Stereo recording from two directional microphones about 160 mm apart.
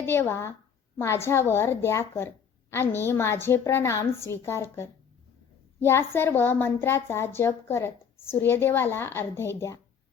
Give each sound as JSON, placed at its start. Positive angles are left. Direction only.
{"t": 0.0, "sound": "a woman's voice", "side_deg": 15}